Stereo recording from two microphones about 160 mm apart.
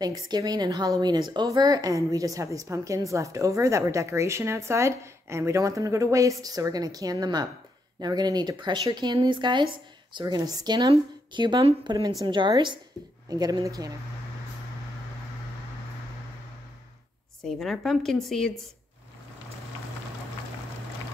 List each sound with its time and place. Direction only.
0.0 s a woman's voice: 25° right (ahead or behind)
17.4 s speech: centre (ahead or behind)